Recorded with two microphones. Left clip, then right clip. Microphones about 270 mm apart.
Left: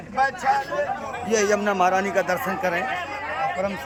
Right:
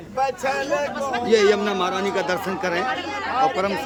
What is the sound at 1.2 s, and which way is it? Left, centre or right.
A man's voice, centre.